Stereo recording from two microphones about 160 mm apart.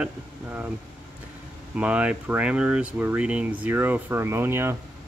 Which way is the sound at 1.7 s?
10° right (ahead or behind).